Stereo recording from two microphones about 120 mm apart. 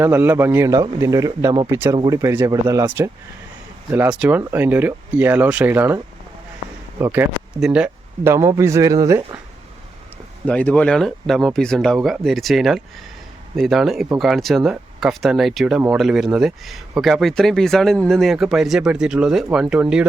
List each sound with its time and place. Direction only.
0.0 s speech: 20° right (ahead or behind)
2.5 s speech: 35° right (ahead or behind)
4.2 s speech: 15° right (ahead or behind)
7.0 s speech: 20° right (ahead or behind)
7.6 s speech: 10° right (ahead or behind)
8.2 s speech: 20° right (ahead or behind)
10.4 s speech: 10° left (ahead or behind); by 20.1 s 5° right (ahead or behind)